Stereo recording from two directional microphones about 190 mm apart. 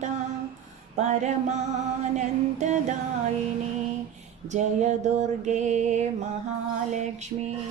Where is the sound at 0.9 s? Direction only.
35° right (ahead or behind).